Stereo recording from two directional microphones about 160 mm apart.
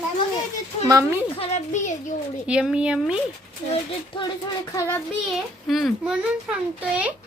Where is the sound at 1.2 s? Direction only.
40° left (ahead or behind).